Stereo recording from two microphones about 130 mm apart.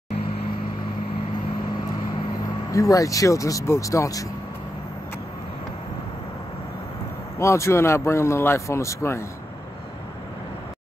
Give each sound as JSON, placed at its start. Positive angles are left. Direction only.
{"t": 2.7, "sound": "speech", "side_deg": 25}
{"t": 7.3, "sound": "speech", "side_deg": 20}